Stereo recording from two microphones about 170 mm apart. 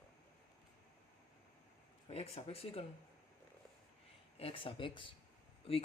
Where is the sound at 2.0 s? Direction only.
35° left (ahead or behind).